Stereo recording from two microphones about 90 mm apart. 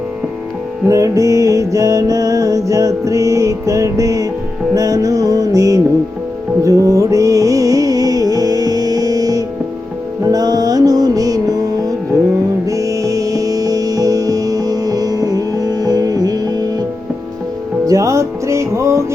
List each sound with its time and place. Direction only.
0.9 s music: 35° right (ahead or behind)
17.8 s music: 35° right (ahead or behind)